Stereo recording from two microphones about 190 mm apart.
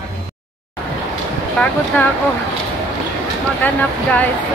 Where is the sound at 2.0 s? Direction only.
10° left (ahead or behind).